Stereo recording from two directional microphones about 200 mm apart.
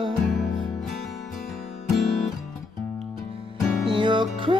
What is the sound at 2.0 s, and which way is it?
Music, centre (ahead or behind).